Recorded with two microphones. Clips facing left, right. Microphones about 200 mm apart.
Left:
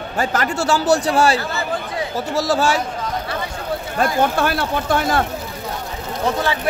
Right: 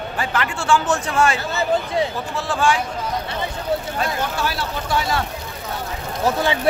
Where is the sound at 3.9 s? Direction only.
50° left (ahead or behind).